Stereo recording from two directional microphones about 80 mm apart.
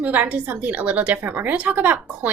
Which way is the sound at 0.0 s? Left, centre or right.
Centre.